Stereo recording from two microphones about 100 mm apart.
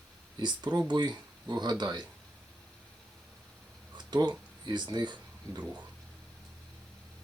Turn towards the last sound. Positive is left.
turn(degrees=-45)  # may be behind; listen again after turning